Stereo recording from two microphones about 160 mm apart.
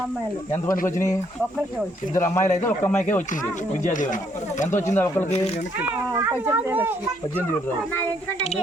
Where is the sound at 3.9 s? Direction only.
55° left (ahead or behind).